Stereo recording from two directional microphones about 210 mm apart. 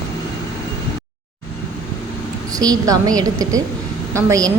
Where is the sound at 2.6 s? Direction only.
15° right (ahead or behind).